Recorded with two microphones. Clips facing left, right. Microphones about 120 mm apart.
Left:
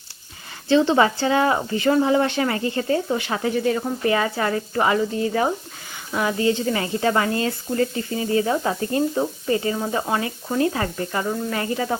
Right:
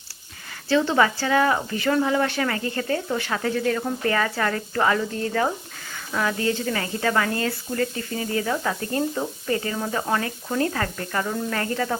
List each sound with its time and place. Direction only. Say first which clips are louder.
0.7 s speech: left 3 dB; 20° left (ahead or behind)